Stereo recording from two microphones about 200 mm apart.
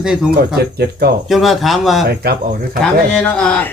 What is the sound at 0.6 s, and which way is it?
Speech, 50° right (ahead or behind).